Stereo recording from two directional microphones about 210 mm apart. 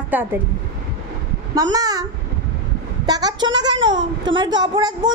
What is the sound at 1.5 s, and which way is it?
Speech, 20° right (ahead or behind).